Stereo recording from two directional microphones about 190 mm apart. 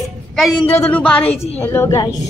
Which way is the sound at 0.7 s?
10° left (ahead or behind).